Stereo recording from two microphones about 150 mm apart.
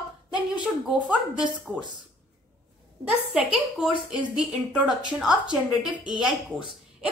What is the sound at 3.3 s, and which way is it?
A woman's voice, 5° right (ahead or behind).